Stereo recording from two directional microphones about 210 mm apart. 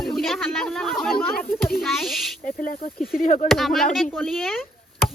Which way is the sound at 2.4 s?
40° left (ahead or behind).